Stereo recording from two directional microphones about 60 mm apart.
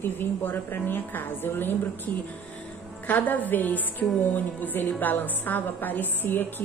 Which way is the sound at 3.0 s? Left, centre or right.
Left.